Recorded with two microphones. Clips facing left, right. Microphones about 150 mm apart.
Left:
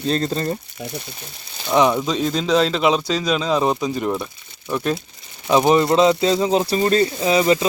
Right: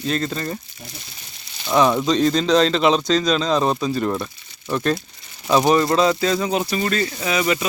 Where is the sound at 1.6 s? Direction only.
15° left (ahead or behind).